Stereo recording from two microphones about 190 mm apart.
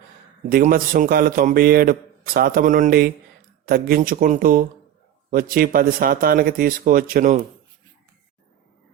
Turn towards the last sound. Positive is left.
turn(degrees=-45)  # may be behind; listen again after turning